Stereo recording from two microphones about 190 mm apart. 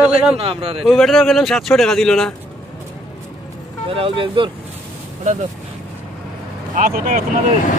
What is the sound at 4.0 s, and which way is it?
Speech, 30° right (ahead or behind).